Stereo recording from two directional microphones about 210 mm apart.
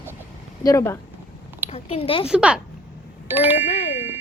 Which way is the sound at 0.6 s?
15° left (ahead or behind).